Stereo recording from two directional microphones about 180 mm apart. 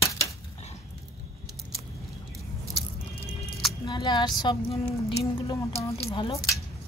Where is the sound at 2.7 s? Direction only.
30° left (ahead or behind).